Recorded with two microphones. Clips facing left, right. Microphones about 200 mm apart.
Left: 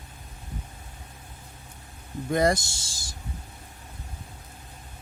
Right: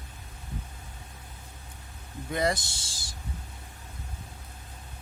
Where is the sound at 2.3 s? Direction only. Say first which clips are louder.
Left 5 dB; 45° left (ahead or behind).